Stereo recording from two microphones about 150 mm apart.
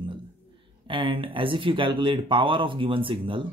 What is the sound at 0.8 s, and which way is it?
Speech, 35° right (ahead or behind).